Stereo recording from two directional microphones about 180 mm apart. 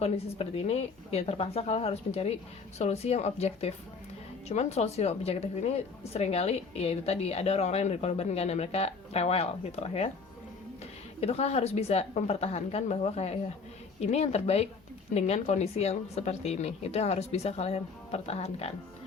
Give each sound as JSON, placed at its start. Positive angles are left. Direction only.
{"t": 0.0, "sound": "a woman's voice", "side_deg": 35}
{"t": 11.2, "sound": "a woman's voice", "side_deg": 35}